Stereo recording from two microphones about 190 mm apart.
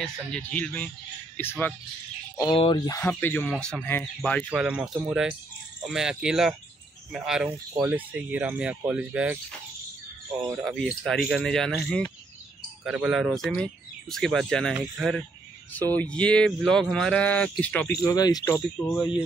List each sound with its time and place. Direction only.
0.0 s speech: 5° left (ahead or behind)
2.3 s speech: 25° left (ahead or behind); by 4.6 s 5° left (ahead or behind)
4.6 s speech: 5° right (ahead or behind)
7.5 s speech: 15° right (ahead or behind)
10.6 s speech: 5° right (ahead or behind)
15.7 s speech: 10° left (ahead or behind)
18.0 s speech: 20° left (ahead or behind)